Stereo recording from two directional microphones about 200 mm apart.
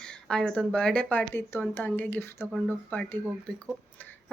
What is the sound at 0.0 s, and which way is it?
Speech, 5° left (ahead or behind).